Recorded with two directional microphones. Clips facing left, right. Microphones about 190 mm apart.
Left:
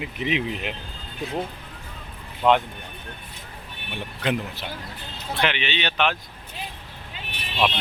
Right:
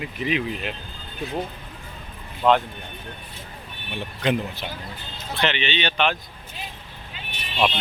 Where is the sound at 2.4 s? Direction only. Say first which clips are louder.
Even; 10° left (ahead or behind).